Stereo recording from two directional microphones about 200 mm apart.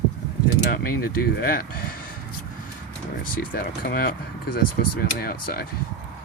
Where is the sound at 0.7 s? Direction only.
50° left (ahead or behind).